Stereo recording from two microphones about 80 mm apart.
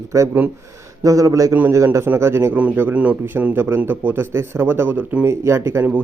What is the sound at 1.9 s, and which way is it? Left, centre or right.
Speech, right.